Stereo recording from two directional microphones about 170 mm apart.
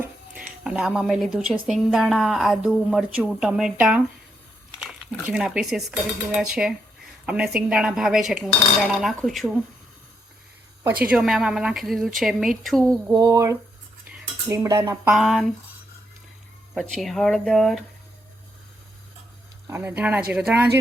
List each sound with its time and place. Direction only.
0.0 s a sound: 5° right (ahead or behind)
1.6 s speech: centre (ahead or behind)
11.0 s speech: 5° right (ahead or behind)
13.1 s speech: 20° right (ahead or behind)
14.4 s dishes: 15° right (ahead or behind)
15.1 s speech: centre (ahead or behind)
16.7 s speech: 5° left (ahead or behind)
19.6 s dishes: 15° right (ahead or behind)